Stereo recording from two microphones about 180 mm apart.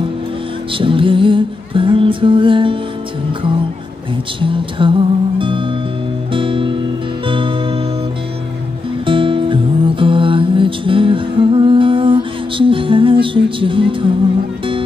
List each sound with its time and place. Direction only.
0.7 s music: 30° right (ahead or behind)
4.4 s music: 30° right (ahead or behind)
9.0 s music: 30° right (ahead or behind)